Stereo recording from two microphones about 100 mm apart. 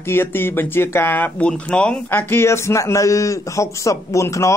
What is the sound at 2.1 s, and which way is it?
A man's voice, 20° left (ahead or behind).